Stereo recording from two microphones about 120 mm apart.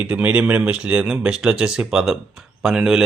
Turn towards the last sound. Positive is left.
turn(degrees=-5)  # may be behind; listen again after turning